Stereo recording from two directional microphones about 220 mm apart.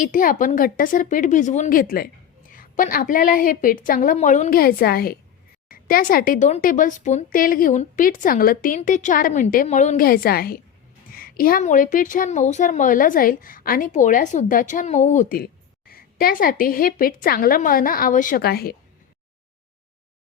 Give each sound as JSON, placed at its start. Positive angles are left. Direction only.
{"t": 0.0, "sound": "speech", "side_deg": 40}